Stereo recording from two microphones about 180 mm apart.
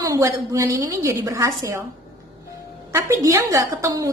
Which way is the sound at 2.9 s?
15° right (ahead or behind).